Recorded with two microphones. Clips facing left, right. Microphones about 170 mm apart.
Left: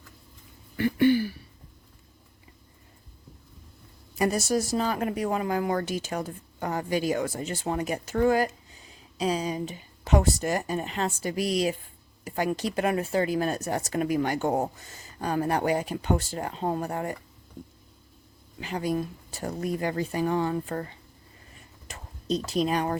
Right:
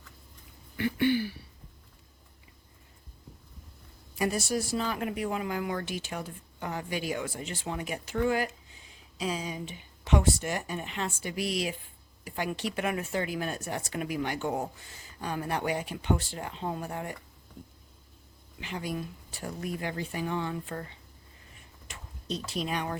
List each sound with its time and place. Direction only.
0.8 s throat clearing: 40° left (ahead or behind)
4.1 s speech: 40° left (ahead or behind)
18.6 s speech: 40° left (ahead or behind)
21.8 s a sound: 40° left (ahead or behind)